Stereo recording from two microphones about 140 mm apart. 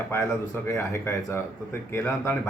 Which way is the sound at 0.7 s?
20° left (ahead or behind).